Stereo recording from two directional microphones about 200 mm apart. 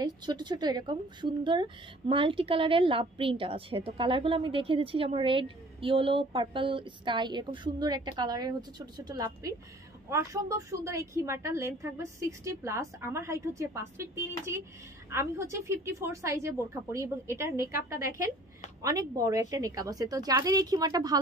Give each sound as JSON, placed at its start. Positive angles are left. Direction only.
{"t": 0.0, "sound": "a woman's voice", "side_deg": -20}